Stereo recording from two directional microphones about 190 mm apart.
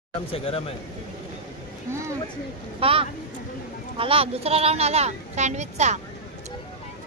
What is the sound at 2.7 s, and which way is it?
A child's voice, 30° right (ahead or behind).